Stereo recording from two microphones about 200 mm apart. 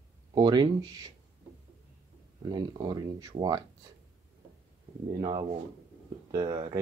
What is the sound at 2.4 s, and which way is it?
Speech, 20° right (ahead or behind).